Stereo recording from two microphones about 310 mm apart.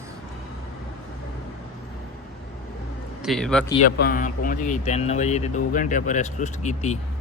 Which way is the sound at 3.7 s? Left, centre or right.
Centre.